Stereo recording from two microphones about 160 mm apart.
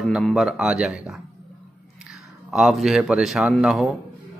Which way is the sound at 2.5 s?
Centre (ahead or behind).